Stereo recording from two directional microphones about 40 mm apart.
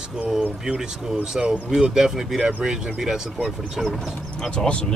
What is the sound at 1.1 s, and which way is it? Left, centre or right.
Speech, right.